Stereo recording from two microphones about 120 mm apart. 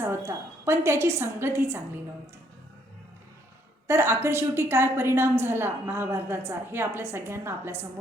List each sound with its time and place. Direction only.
0.0 s a woman's voice: 20° right (ahead or behind)
3.8 s a woman's voice: 20° right (ahead or behind)